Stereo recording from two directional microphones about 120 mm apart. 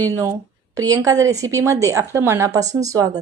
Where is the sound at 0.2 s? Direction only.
25° right (ahead or behind).